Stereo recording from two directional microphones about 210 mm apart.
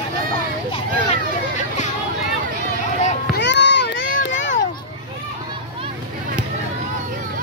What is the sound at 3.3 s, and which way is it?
Run, 55° left (ahead or behind).